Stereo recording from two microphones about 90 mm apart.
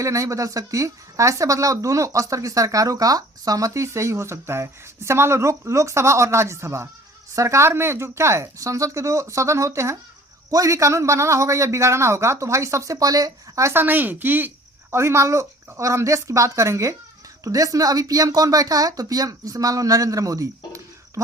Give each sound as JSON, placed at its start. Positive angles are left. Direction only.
{"t": 0.0, "sound": "speech", "side_deg": -35}
{"t": 13.8, "sound": "speech", "side_deg": -20}